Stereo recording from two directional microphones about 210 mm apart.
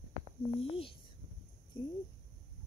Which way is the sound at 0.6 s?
25° left (ahead or behind).